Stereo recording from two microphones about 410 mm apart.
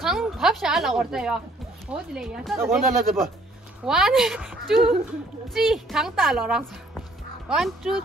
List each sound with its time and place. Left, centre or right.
0.0 s a woman's voice: centre